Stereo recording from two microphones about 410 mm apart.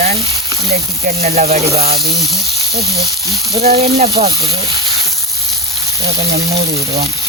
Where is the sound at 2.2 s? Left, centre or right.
Centre.